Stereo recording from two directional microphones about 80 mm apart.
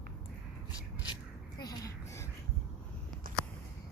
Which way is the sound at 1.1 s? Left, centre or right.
Left.